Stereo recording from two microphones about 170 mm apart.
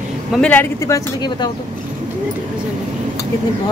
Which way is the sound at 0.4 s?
10° left (ahead or behind).